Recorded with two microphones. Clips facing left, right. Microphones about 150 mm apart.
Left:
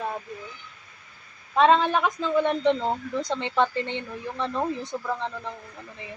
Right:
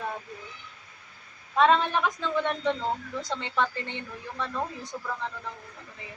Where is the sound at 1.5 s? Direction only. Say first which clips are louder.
Left 3 dB; 20° left (ahead or behind).